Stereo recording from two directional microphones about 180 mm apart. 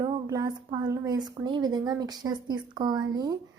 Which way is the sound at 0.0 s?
20° right (ahead or behind).